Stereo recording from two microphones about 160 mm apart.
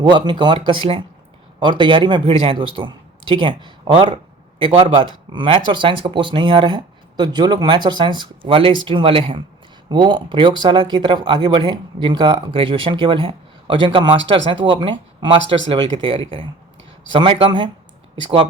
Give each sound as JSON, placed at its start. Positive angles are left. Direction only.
{"t": 0.0, "sound": "speech", "side_deg": -30}